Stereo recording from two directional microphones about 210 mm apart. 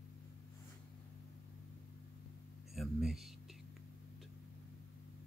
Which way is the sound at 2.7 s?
Centre (ahead or behind).